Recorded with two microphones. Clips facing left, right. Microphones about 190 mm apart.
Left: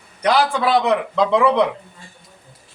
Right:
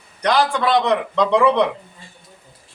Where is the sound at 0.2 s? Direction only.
5° left (ahead or behind).